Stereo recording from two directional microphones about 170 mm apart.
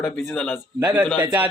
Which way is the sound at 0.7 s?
10° right (ahead or behind).